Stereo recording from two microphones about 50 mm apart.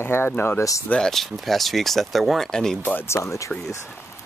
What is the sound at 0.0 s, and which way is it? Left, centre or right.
Speech, left.